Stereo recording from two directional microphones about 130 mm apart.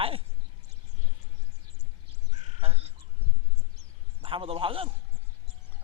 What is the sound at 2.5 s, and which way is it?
Crow, 50° right (ahead or behind).